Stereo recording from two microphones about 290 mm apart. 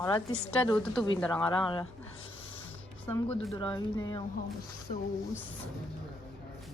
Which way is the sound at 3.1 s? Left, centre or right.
Centre.